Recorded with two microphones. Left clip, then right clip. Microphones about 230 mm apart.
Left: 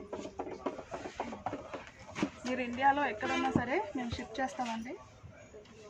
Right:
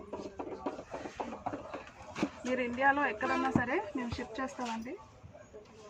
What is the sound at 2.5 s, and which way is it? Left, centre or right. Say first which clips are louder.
Speech: even; centre.